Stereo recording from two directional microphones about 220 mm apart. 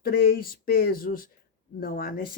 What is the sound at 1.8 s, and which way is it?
Speech, 40° left (ahead or behind).